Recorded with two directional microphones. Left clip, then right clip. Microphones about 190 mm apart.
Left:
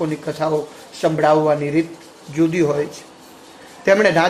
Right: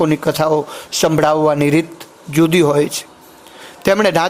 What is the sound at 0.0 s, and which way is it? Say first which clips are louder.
A man's voice: right 7 dB; 50° right (ahead or behind).